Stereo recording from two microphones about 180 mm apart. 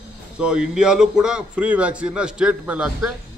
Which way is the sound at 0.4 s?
5° right (ahead or behind).